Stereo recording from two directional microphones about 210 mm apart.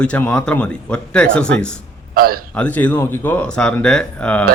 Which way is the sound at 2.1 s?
45° right (ahead or behind).